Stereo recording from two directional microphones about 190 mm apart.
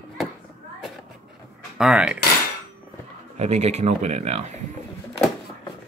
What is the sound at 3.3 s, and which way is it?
Speech, 35° right (ahead or behind).